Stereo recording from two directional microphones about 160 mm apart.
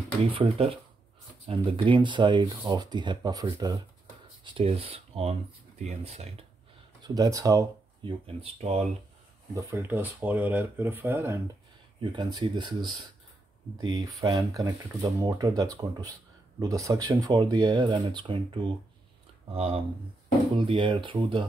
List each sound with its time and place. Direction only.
0.2 s speech: 40° right (ahead or behind)
7.0 s speech: 20° right (ahead or behind)
8.0 s speech: 35° right (ahead or behind)
9.5 s speech: 15° right (ahead or behind)
12.0 s speech: 25° right (ahead or behind)